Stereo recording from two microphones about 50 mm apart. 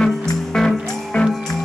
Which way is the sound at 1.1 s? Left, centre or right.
Left.